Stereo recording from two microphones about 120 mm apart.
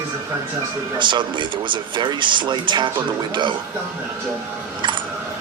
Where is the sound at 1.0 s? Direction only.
40° right (ahead or behind).